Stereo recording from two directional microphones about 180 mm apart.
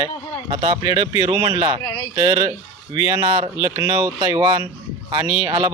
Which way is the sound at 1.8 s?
20° left (ahead or behind).